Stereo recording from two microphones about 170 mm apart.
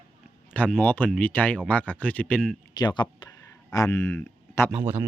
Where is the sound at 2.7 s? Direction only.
25° left (ahead or behind).